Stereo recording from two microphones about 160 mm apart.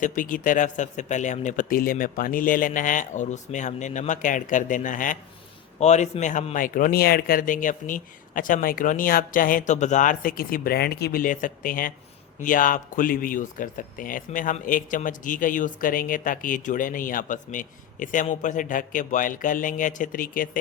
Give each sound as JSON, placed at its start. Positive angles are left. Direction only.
{"t": 0.0, "sound": "speech", "side_deg": 55}